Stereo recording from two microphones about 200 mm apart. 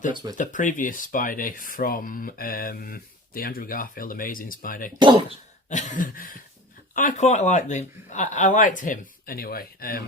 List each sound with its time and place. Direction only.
0.1 s speech: 20° right (ahead or behind)
0.3 s speech: 40° left (ahead or behind)
4.9 s speech: 25° right (ahead or behind)
5.6 s speech: 40° left (ahead or behind)